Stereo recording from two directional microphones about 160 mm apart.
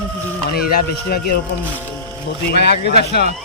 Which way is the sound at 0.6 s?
75° left (ahead or behind).